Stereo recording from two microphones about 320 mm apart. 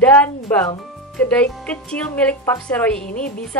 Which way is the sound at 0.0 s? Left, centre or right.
Centre.